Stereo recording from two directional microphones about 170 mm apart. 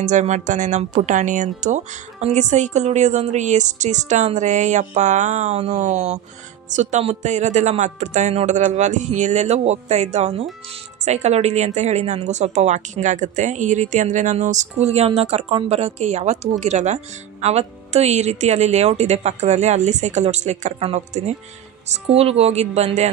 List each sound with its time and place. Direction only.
0.0 s speech: 45° right (ahead or behind)